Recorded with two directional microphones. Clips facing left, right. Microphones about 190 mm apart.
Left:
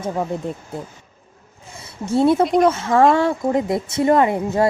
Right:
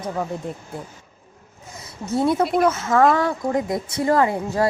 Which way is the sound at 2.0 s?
25° left (ahead or behind).